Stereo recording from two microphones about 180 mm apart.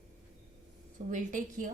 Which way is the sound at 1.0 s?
45° right (ahead or behind).